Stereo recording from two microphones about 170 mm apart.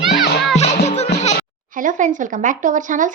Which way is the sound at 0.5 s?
40° left (ahead or behind).